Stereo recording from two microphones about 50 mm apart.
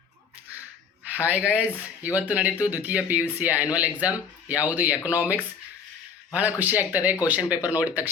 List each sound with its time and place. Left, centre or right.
1.1 s speech: right
6.3 s speech: right